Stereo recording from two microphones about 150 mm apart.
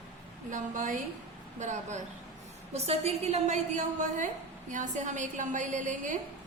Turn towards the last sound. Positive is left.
turn(degrees=-55)  # may be behind; listen again after turning